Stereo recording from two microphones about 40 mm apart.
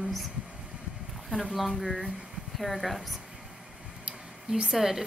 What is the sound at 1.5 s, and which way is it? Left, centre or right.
Speech, centre.